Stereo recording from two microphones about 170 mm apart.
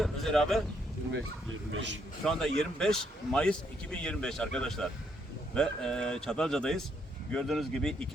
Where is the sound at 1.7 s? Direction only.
90° right.